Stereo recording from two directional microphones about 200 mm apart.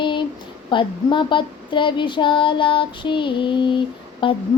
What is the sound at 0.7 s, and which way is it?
Child singing, 25° left (ahead or behind).